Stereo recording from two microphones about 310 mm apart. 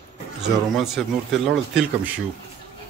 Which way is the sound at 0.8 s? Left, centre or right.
Centre.